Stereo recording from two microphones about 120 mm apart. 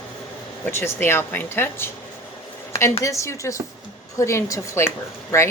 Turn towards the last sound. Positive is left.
turn(degrees=20)  # may be behind; listen again after turning